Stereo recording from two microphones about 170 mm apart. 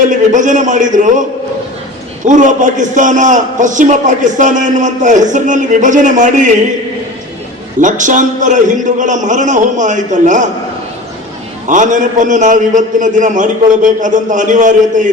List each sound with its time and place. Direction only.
0.1 s a man's voice: 45° right (ahead or behind)
2.2 s a man's voice: 50° right (ahead or behind)
7.8 s a man's voice: 50° right (ahead or behind)
11.7 s a man's voice: 50° right (ahead or behind)